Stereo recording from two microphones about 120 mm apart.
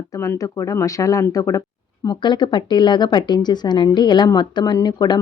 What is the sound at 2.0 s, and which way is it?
A woman's voice, 40° left (ahead or behind).